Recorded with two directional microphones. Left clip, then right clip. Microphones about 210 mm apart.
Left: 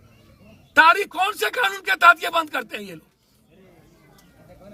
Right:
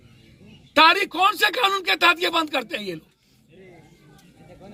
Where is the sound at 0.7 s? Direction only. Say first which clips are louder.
Left 1 dB; 15° left (ahead or behind).